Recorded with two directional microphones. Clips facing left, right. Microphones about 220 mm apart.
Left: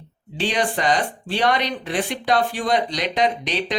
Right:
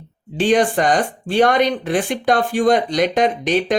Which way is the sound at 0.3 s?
50° right (ahead or behind).